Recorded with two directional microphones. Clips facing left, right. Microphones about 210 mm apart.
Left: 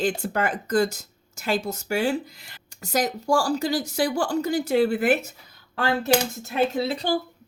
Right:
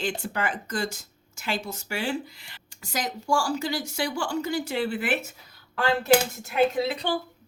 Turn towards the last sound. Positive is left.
turn(degrees=35)  # may be behind; listen again after turning